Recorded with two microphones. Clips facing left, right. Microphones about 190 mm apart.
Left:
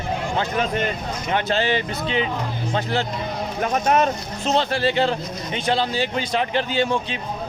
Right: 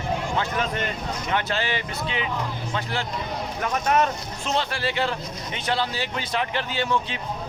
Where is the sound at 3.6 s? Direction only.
25° left (ahead or behind).